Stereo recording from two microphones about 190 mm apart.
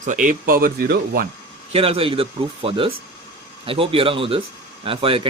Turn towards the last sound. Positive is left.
turn(degrees=-30)  # may be behind; listen again after turning